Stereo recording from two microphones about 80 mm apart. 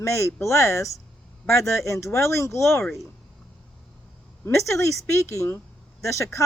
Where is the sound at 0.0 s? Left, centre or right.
Left.